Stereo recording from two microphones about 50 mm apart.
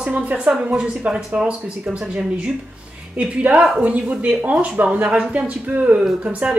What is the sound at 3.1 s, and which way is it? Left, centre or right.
Speech, right.